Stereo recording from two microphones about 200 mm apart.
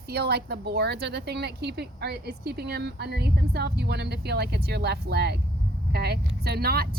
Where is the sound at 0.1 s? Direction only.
55° right (ahead or behind).